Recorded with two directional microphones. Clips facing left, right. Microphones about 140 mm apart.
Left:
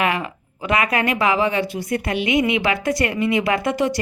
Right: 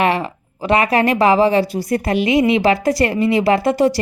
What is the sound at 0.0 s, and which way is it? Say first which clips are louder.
Speech: right 5 dB; 35° right (ahead or behind).